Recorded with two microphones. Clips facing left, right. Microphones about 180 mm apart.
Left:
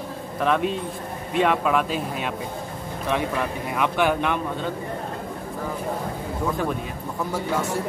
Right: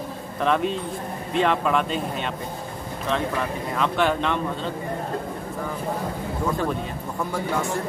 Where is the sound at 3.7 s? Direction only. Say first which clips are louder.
Left 1 dB; 10° left (ahead or behind).